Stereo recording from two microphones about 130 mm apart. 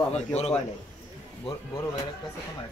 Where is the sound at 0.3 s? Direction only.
55° left (ahead or behind).